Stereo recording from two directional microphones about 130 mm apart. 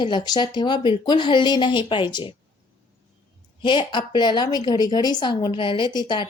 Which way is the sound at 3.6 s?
35° left (ahead or behind).